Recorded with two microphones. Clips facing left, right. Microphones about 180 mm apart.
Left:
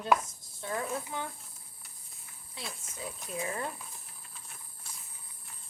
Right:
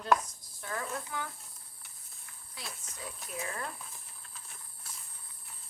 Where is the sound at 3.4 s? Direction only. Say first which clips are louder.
Left 4 dB; 20° left (ahead or behind).